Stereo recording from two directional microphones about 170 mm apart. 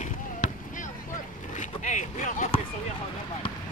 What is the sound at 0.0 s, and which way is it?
Basketball bounce, 50° left (ahead or behind).